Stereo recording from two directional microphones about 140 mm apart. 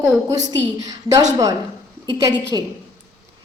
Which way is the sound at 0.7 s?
25° right (ahead or behind).